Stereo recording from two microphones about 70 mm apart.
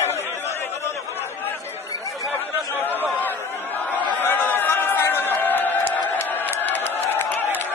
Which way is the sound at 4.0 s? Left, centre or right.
Left.